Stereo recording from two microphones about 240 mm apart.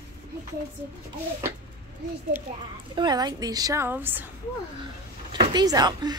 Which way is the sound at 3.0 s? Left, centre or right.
Centre.